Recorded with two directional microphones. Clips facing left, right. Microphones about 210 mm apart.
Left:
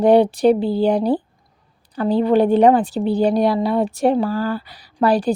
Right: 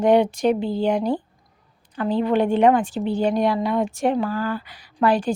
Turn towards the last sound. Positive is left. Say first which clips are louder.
# left 3 dB
turn(degrees=35)  # may be behind; listen again after turning